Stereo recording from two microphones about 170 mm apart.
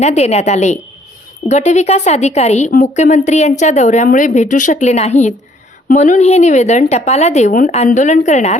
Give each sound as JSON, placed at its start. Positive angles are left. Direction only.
{"t": 0.0, "sound": "speech", "side_deg": 40}